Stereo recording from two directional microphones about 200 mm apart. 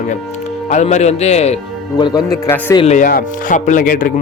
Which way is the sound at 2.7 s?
35° left (ahead or behind).